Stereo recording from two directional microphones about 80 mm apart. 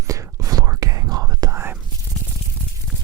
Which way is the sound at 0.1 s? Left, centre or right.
Right.